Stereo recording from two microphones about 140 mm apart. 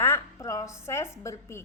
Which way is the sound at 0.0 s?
20° left (ahead or behind).